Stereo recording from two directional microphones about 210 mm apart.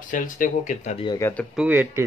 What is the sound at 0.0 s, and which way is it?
Speech, 40° left (ahead or behind).